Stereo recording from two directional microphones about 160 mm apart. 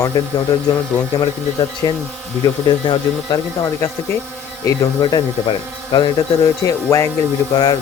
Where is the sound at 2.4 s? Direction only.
25° left (ahead or behind).